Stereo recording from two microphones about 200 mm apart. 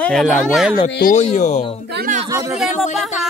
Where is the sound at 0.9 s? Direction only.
45° left (ahead or behind).